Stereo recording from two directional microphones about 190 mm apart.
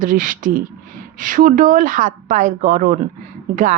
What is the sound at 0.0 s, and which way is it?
A woman's voice, 45° right (ahead or behind).